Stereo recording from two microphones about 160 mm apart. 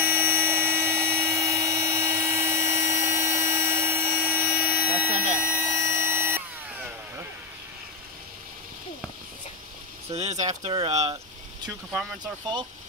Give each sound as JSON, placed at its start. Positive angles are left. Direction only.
{"t": 0.0, "sound": "a sound", "side_deg": -15}
{"t": 1.5, "sound": "dental drill", "side_deg": -15}
{"t": 10.1, "sound": "speech", "side_deg": -45}
{"t": 11.9, "sound": "speech", "side_deg": 0}
{"t": 12.2, "sound": "speech", "side_deg": -30}